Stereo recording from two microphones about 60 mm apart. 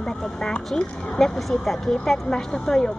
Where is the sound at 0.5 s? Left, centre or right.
Centre.